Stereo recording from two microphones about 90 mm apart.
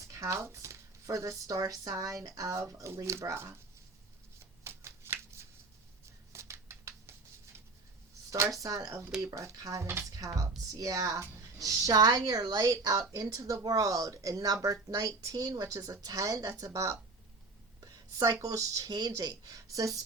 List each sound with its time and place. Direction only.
0.0 s a woman's voice: 35° right (ahead or behind)
4.6 s shuffling cards: 30° right (ahead or behind)
6.3 s a sound: 30° right (ahead or behind)
8.6 s a woman's voice: 40° right (ahead or behind)
8.9 s a woman's voice: 30° right (ahead or behind)
10.2 s a woman's voice: 40° right (ahead or behind)